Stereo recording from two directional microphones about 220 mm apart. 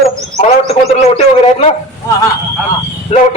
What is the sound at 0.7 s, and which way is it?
A man's voice, 30° left (ahead or behind).